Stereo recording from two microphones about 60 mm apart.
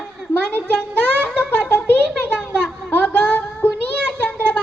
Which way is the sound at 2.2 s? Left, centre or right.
Left.